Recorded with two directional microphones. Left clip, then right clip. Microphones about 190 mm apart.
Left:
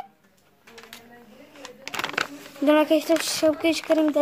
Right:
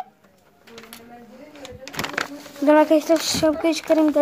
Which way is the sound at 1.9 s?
5° left (ahead or behind).